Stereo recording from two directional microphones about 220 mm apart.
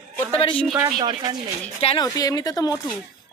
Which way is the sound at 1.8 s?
25° left (ahead or behind).